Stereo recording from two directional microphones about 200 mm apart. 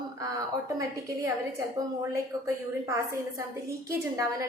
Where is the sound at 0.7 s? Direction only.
15° right (ahead or behind).